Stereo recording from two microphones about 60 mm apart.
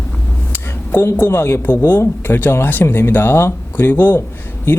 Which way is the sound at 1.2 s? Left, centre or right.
Left.